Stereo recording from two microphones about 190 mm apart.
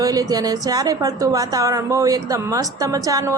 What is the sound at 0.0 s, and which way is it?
A woman's voice, 20° right (ahead or behind).